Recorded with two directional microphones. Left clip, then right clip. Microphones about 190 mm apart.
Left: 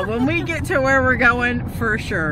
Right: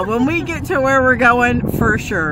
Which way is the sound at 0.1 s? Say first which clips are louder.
Right 3 dB; 20° right (ahead or behind).